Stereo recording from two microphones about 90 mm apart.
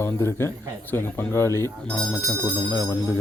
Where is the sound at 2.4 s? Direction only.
40° left (ahead or behind).